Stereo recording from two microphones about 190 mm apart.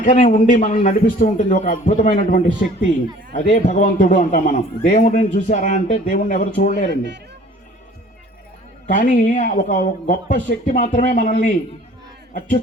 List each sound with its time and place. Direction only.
0.0 s a man's voice: 40° left (ahead or behind)
8.9 s speech: 45° left (ahead or behind)